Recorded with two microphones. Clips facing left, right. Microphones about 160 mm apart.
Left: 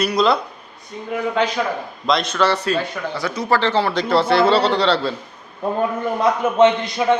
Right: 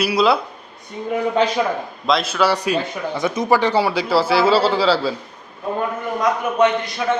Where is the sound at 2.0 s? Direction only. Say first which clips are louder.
Even; 5° right (ahead or behind).